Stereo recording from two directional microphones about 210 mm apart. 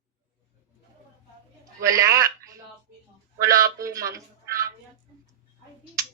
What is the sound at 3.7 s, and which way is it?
Speech, 15° right (ahead or behind).